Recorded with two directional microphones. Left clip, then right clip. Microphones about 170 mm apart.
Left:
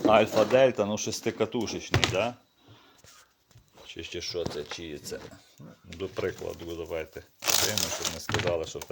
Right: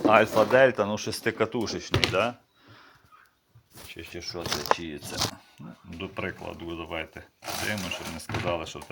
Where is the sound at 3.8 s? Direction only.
20° left (ahead or behind).